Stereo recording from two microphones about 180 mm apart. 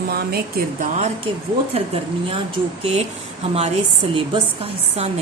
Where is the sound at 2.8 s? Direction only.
35° right (ahead or behind).